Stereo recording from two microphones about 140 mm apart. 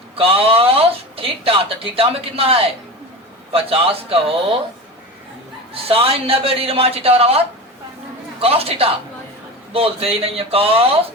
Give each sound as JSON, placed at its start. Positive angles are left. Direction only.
{"t": 0.2, "sound": "speech", "side_deg": -40}
{"t": 5.9, "sound": "speech", "side_deg": -40}